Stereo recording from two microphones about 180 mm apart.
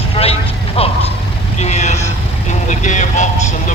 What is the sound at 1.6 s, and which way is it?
Vehicle, 40° left (ahead or behind).